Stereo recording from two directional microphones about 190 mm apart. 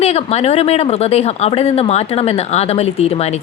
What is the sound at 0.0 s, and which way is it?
Speech, 35° left (ahead or behind).